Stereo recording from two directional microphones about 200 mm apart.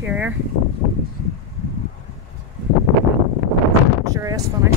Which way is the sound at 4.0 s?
15° right (ahead or behind).